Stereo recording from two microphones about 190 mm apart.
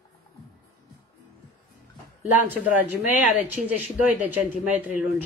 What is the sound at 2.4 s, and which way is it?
Speech, 10° right (ahead or behind).